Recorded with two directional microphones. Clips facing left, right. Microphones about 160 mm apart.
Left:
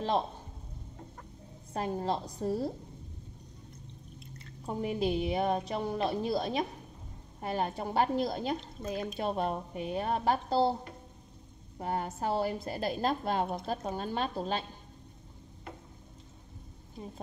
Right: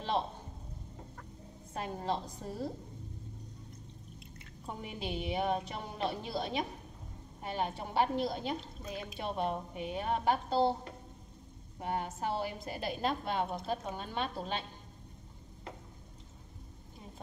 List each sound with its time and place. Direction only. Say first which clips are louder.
1.7 s a woman's voice: left 4 dB; 35° left (ahead or behind)
4.6 s a woman's voice: left 9 dB; 40° left (ahead or behind)
11.8 s a woman's voice: left 2 dB; 40° left (ahead or behind)